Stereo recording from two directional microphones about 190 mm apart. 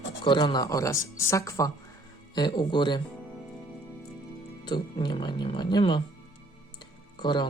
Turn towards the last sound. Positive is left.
turn(degrees=25)  # may be behind; listen again after turning